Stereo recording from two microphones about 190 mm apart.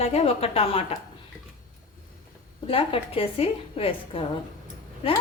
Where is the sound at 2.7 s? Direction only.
30° left (ahead or behind).